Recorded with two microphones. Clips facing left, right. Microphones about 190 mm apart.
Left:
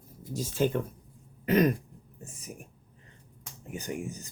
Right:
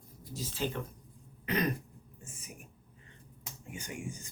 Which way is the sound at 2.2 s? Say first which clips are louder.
Left 7 dB; 40° left (ahead or behind).